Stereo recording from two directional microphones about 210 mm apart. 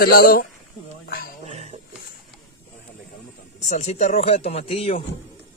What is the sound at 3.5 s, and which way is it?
Speech, 35° left (ahead or behind).